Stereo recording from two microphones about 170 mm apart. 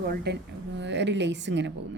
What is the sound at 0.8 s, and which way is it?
Speech, 90° right.